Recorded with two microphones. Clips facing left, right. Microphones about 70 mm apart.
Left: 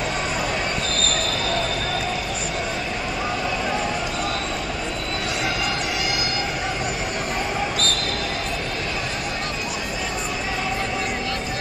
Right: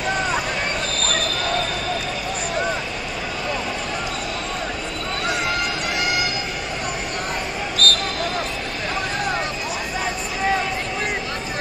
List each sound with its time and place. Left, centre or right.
7.8 s basketball bounce: right